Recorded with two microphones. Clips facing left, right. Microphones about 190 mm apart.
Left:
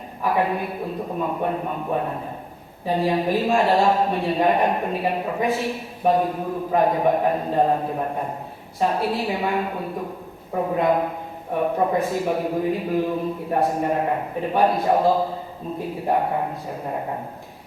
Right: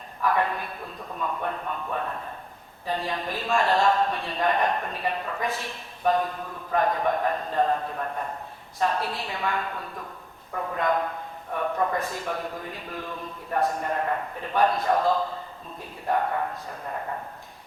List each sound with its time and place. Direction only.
0.3 s speech: 10° left (ahead or behind)
12.0 s speech: 10° left (ahead or behind)
13.5 s a man's voice: 25° left (ahead or behind)
16.0 s speech: 15° left (ahead or behind)